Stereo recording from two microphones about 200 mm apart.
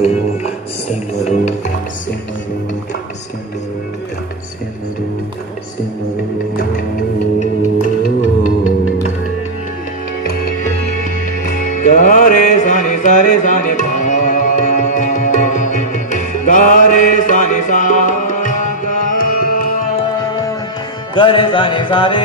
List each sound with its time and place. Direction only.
0.0 s music: 35° left (ahead or behind)
8.0 s music: 40° left (ahead or behind)
11.4 s music: 40° left (ahead or behind)
21.1 s music: 25° left (ahead or behind)